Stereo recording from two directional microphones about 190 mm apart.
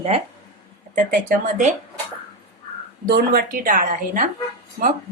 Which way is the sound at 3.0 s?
55° right (ahead or behind).